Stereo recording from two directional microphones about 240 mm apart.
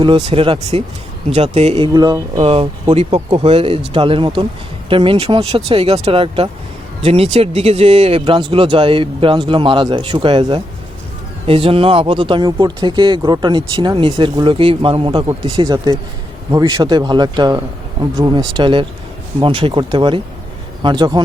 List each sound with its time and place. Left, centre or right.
0.0 s speech: right